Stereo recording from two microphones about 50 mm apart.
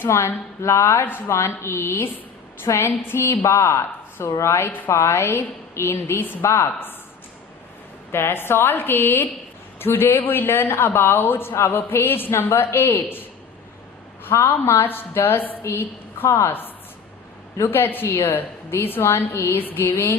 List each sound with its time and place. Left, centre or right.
0.1 s a woman's voice: left
3.2 s a woman's voice: left
6.4 s a woman's voice: left
8.1 s a woman's voice: left
11.5 s a woman's voice: left
14.3 s a woman's voice: left
14.8 s a woman's voice: left
17.6 s a woman's voice: left
19.5 s a woman's voice: left